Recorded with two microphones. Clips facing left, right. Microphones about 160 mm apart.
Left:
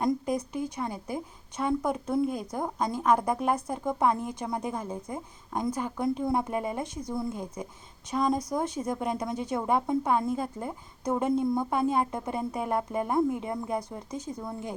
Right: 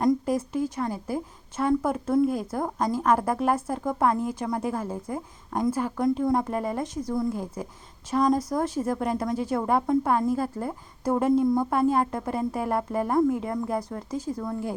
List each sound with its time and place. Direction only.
0.0 s a woman's voice: centre (ahead or behind)